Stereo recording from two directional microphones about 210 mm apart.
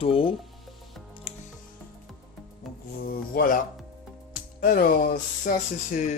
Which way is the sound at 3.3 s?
40° left (ahead or behind).